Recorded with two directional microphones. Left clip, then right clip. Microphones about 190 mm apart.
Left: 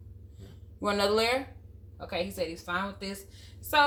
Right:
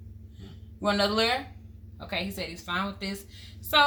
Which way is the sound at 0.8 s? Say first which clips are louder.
Right 1 dB; 30° left (ahead or behind).